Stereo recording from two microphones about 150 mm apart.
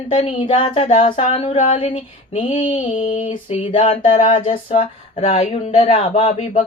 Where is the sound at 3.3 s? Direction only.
40° left (ahead or behind).